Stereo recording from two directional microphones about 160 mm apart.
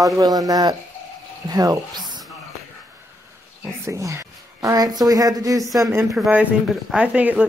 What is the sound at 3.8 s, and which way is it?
Speech, 20° right (ahead or behind).